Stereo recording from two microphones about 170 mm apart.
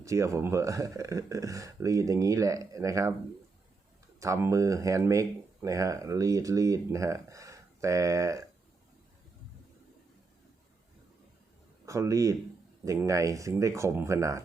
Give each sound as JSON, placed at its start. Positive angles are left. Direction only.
{"t": 0.0, "sound": "speech", "side_deg": -20}
{"t": 4.2, "sound": "speech", "side_deg": -15}
{"t": 11.9, "sound": "speech", "side_deg": -20}